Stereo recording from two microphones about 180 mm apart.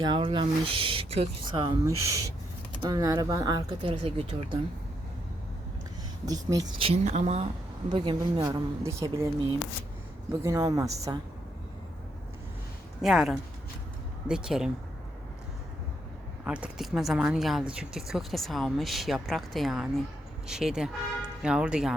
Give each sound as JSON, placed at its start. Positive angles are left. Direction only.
{"t": 0.0, "sound": "speech", "side_deg": -25}
{"t": 1.8, "sound": "speech", "side_deg": -15}
{"t": 6.2, "sound": "speech", "side_deg": -20}
{"t": 6.8, "sound": "speech", "side_deg": -35}
{"t": 7.9, "sound": "speech", "side_deg": -25}
{"t": 13.0, "sound": "speech", "side_deg": 0}
{"t": 16.4, "sound": "speech", "side_deg": -5}